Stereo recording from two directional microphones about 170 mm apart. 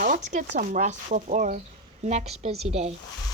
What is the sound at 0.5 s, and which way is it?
A woman's voice, 50° right (ahead or behind).